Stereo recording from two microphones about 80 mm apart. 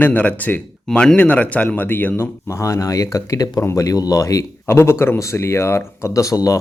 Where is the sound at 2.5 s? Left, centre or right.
Left.